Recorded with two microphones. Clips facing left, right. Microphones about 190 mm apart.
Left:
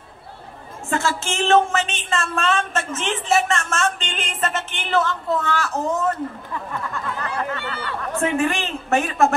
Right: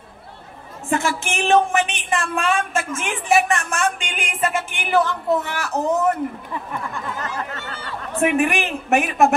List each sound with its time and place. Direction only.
0.8 s speech: 15° right (ahead or behind)
7.5 s a sound: 60° left (ahead or behind)
8.2 s speech: 15° right (ahead or behind)